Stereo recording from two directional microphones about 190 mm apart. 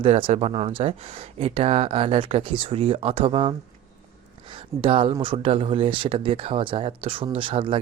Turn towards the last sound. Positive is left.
turn(degrees=-25)  # may be behind; listen again after turning